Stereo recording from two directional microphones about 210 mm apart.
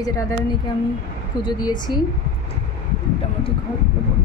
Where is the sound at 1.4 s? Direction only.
20° left (ahead or behind).